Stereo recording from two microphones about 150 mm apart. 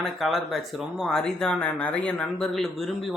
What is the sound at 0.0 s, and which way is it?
Speech, centre (ahead or behind).